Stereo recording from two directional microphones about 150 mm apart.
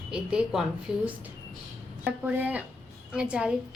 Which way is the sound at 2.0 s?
10° right (ahead or behind).